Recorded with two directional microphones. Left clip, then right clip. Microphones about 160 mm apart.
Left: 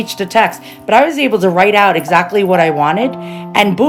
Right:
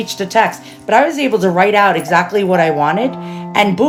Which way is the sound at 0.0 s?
15° left (ahead or behind).